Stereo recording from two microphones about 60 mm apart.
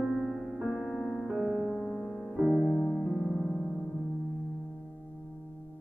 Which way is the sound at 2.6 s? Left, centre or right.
Centre.